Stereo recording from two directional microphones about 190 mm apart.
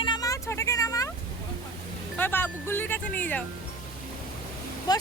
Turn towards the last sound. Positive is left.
turn(degrees=20)  # may be behind; listen again after turning